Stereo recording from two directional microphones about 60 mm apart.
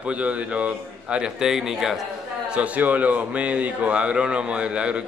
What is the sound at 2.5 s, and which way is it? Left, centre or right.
A man's voice, right.